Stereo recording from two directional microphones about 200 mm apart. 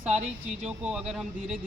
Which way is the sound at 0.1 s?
35° right (ahead or behind).